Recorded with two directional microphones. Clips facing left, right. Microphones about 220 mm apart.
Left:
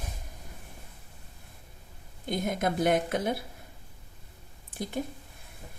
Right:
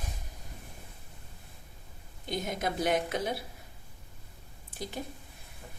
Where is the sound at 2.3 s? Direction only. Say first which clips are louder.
Left 4 dB; 50° left (ahead or behind).